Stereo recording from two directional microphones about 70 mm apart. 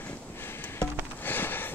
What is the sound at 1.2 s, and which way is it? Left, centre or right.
Sniff, left.